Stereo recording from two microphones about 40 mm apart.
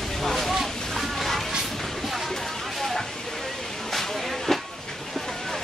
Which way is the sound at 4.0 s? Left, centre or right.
Centre.